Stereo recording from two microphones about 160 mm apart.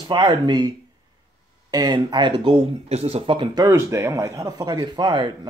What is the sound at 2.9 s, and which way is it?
Speech, 40° right (ahead or behind).